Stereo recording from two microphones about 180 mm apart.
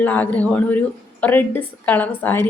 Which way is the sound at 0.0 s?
10° left (ahead or behind).